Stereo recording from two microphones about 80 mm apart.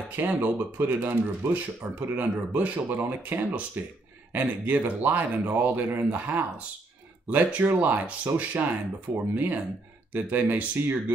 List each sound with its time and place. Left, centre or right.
0.1 s speech: right